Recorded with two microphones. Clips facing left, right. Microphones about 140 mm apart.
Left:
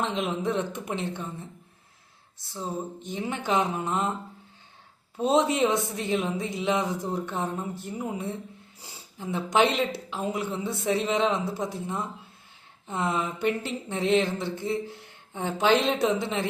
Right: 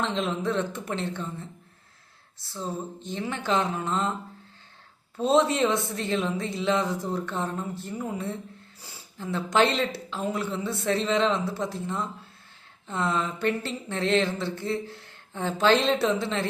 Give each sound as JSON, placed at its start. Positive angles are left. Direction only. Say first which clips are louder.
{"t": 0.0, "sound": "speech", "louder": "even", "side_deg": 15}
{"t": 5.1, "sound": "speech", "louder": "right 1 dB", "side_deg": 15}